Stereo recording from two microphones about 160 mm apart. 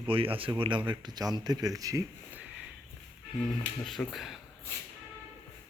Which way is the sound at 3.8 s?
Centre (ahead or behind).